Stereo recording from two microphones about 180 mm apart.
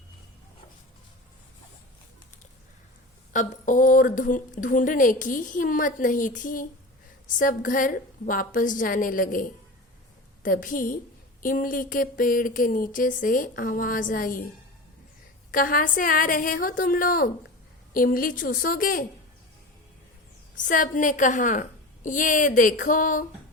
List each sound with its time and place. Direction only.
3.3 s a woman's voice: 45° left (ahead or behind)
15.5 s a woman's voice: 50° left (ahead or behind)
20.6 s a woman's voice: 45° left (ahead or behind)